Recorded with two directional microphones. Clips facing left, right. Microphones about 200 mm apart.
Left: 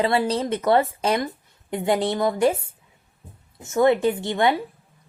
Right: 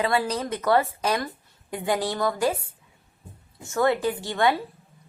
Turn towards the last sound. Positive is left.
turn(degrees=20)  # may be behind; listen again after turning